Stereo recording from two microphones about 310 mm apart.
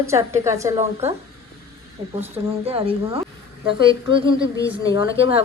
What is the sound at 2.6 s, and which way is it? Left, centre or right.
A woman's voice, centre.